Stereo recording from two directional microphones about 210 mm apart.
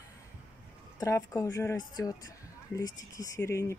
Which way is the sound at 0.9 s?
15° left (ahead or behind).